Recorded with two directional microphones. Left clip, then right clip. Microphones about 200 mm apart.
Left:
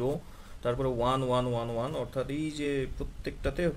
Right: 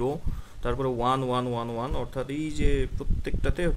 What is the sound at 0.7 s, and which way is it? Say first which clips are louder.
A man's voice: right 3 dB; 15° right (ahead or behind).